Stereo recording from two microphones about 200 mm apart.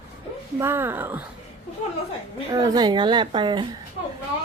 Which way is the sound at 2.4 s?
20° right (ahead or behind).